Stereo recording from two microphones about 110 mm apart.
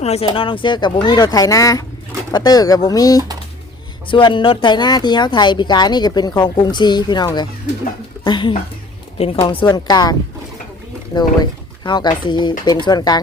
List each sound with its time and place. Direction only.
0.0 s speech: 75° left (ahead or behind)
0.3 s speech: 55° left (ahead or behind); by 3.2 s 35° left (ahead or behind)
4.1 s speech: 50° left (ahead or behind)
9.1 s speech: 60° left (ahead or behind); by 13.2 s 40° left (ahead or behind)